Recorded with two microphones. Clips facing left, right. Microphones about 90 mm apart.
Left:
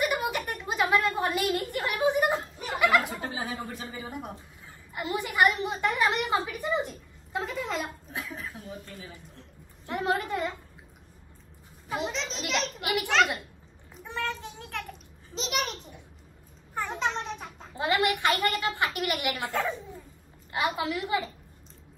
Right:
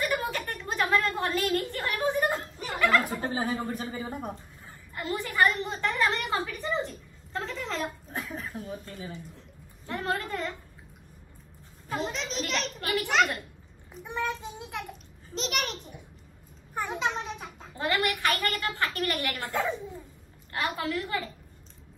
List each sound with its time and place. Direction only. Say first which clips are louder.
0.0 s a sound: left 1 dB; 15° left (ahead or behind)
3.0 s a woman's voice: right 3 dB; 40° right (ahead or behind)
4.9 s a woman's voice: left 1 dB; 15° left (ahead or behind)
8.4 s a woman's voice: right 3 dB; 40° right (ahead or behind)
9.8 s a woman's voice: left 3 dB; 15° left (ahead or behind)
12.1 s a child's voice: even; centre (ahead or behind)
12.8 s a woman's voice: even; 20° left (ahead or behind)
14.0 s a child's voice: right 1 dB; 15° right (ahead or behind)
15.3 s a child's voice: even; centre (ahead or behind)
17.7 s a woman's voice: left 2 dB; 20° left (ahead or behind)
20.5 s a woman's voice: left 2 dB; 15° left (ahead or behind)